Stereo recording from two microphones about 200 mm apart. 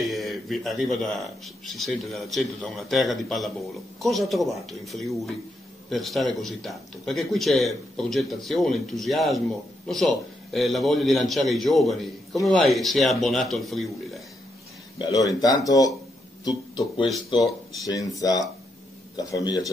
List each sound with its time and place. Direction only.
0.0 s a man's voice: centre (ahead or behind)
15.0 s speech: 15° left (ahead or behind)